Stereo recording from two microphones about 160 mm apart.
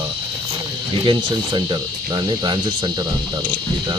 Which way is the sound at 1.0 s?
25° right (ahead or behind).